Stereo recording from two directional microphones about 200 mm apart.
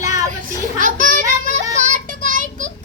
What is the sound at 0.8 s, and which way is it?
Child singing, 40° right (ahead or behind).